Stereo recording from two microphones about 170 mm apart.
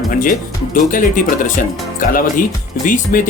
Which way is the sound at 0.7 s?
50° left (ahead or behind).